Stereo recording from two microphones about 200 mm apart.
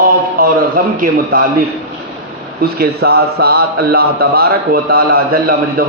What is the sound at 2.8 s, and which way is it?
Speech, 50° right (ahead or behind).